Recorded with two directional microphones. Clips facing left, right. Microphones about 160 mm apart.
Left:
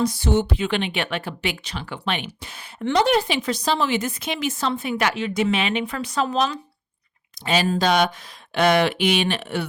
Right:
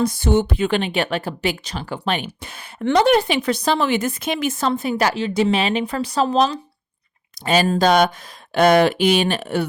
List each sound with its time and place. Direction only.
0.0 s a woman's voice: 50° right (ahead or behind); by 6.6 s 35° right (ahead or behind)
7.4 s a woman's voice: 45° right (ahead or behind)